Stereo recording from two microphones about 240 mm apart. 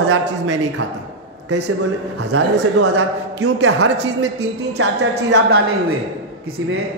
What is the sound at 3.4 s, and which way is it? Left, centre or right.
A man's voice, right.